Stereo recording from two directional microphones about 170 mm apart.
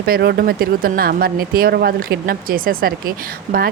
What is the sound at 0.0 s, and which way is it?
Speech, 70° right (ahead or behind).